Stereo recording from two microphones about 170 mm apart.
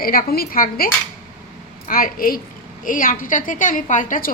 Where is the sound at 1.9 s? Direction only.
55° left (ahead or behind).